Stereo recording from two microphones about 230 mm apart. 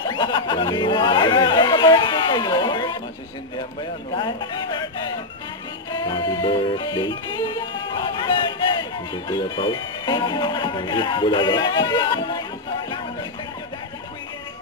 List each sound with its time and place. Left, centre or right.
0.0 s chatter: centre
4.1 s speech: left
5.9 s music: centre